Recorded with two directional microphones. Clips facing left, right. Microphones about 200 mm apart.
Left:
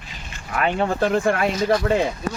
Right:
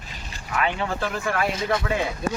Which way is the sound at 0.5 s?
45° left (ahead or behind).